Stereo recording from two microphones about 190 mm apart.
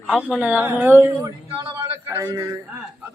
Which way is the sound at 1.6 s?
20° right (ahead or behind).